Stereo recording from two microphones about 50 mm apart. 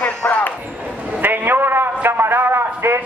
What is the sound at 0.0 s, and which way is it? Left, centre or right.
Basketball bounce, left.